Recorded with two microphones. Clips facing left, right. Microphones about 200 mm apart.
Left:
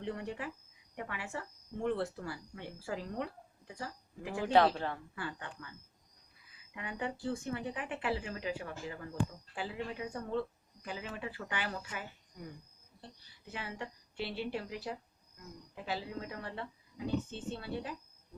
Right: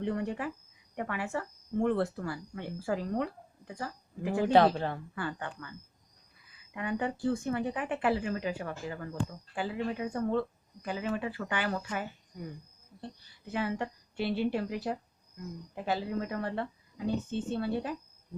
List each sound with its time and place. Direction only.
0.0 s a woman's voice: 55° right (ahead or behind)
4.5 s speech: 35° right (ahead or behind)
5.1 s speech: 55° right (ahead or behind)
6.7 s a woman's voice: 55° right (ahead or behind)
13.5 s a woman's voice: 55° right (ahead or behind)